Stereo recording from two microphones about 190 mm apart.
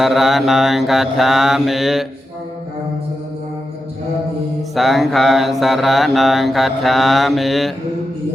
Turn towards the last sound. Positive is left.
turn(degrees=0)  # may be behind; listen again after turning